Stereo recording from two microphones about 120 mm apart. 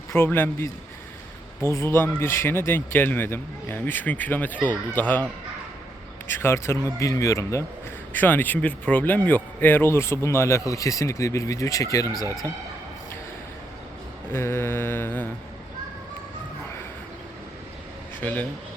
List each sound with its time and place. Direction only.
0.1 s speech: 15° left (ahead or behind)
6.3 s a man's voice: 20° left (ahead or behind)
14.3 s a man's voice: 20° left (ahead or behind)
18.2 s speech: 15° left (ahead or behind)